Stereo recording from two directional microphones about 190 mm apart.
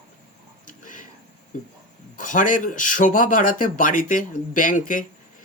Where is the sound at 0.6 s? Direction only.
45° left (ahead or behind).